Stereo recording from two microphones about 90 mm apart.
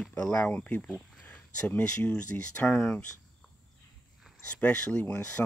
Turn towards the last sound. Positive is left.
turn(degrees=20)  # may be behind; listen again after turning